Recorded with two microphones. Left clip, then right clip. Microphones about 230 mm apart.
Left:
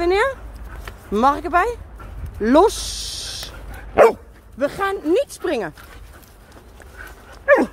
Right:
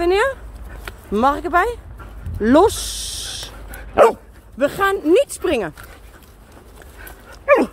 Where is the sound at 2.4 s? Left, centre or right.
Centre.